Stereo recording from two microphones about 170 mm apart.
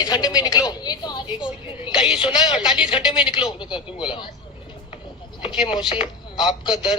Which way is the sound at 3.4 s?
25° left (ahead or behind).